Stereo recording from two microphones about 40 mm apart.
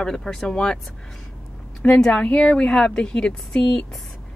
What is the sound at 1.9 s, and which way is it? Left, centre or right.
Speech, centre.